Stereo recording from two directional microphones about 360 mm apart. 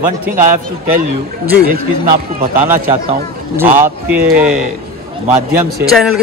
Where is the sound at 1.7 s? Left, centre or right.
Right.